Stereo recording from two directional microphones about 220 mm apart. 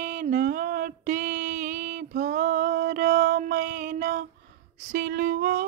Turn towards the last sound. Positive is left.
turn(degrees=-45)  # may be behind; listen again after turning